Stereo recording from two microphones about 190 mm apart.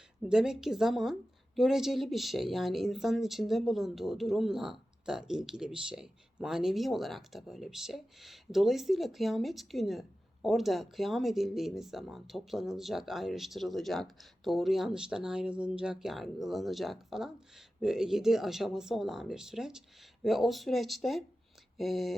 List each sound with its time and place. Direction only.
0.3 s speech: 5° right (ahead or behind)